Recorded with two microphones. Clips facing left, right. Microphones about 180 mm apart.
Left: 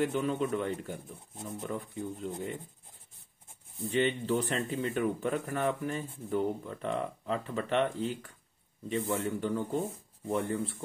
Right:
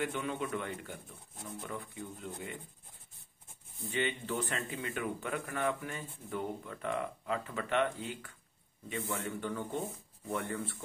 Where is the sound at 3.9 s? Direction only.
35° left (ahead or behind).